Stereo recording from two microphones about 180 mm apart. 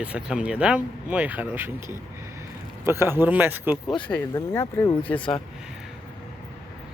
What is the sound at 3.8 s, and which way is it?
Speech, 25° left (ahead or behind).